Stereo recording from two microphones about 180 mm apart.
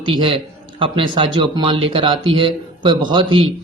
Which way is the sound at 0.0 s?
30° right (ahead or behind).